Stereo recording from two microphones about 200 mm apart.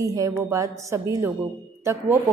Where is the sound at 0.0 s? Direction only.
15° right (ahead or behind).